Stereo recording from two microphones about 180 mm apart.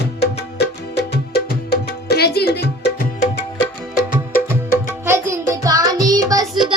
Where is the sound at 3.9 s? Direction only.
50° left (ahead or behind).